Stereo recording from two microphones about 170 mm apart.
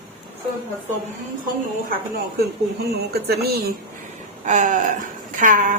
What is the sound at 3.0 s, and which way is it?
Speech, 70° right (ahead or behind).